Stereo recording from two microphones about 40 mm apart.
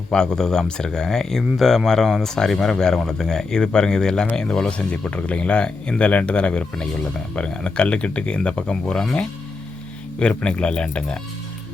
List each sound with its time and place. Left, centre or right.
0.1 s speech: centre
4.9 s speech: left
6.1 s speech: left
10.2 s speech: left